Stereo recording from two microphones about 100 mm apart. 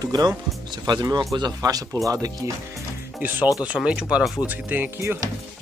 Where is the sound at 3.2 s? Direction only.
20° right (ahead or behind).